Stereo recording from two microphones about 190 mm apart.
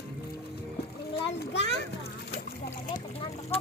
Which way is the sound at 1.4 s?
65° left (ahead or behind).